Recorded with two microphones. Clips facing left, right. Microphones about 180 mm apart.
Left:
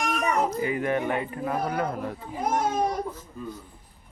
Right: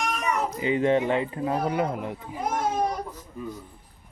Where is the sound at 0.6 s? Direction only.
25° right (ahead or behind).